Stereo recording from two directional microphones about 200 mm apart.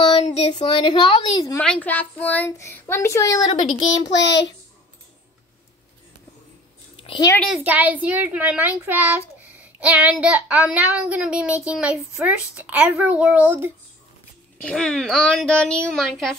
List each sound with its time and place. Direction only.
0.0 s speech: 30° left (ahead or behind)
1.6 s a child's voice: 5° left (ahead or behind)
4.2 s a child's voice: 60° left (ahead or behind)
7.0 s a sound: 25° left (ahead or behind)
7.6 s a child's voice: 10° right (ahead or behind)
14.6 s speech: 5° left (ahead or behind)